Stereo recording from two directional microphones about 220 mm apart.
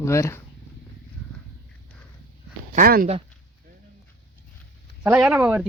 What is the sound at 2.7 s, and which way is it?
Speech, 40° right (ahead or behind).